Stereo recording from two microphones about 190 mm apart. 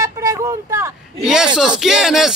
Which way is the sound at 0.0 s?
15° right (ahead or behind).